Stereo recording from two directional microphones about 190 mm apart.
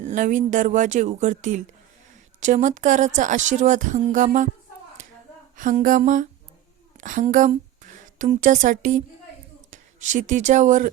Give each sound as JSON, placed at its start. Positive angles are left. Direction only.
{"t": 0.0, "sound": "speech", "side_deg": -40}
{"t": 5.5, "sound": "mantra", "side_deg": -45}
{"t": 6.9, "sound": "a woman's voice", "side_deg": -45}